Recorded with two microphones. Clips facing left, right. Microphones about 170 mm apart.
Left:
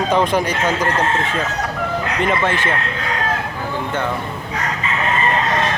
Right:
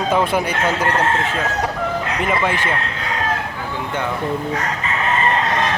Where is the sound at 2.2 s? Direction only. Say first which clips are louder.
Left 2 dB; 10° right (ahead or behind).